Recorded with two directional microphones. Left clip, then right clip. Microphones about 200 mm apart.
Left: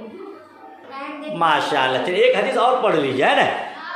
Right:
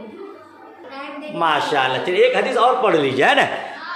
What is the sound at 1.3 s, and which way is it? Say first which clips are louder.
A man's voice: even; centre (ahead or behind).